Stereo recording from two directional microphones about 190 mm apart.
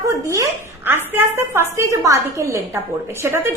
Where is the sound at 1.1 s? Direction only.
10° right (ahead or behind).